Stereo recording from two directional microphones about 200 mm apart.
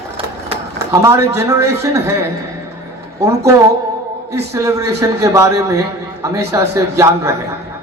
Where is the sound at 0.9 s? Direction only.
15° right (ahead or behind).